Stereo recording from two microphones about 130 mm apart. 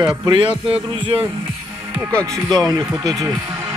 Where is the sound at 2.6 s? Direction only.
25° right (ahead or behind).